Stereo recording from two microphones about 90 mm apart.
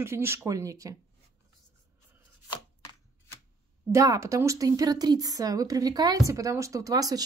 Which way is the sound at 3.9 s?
35° right (ahead or behind).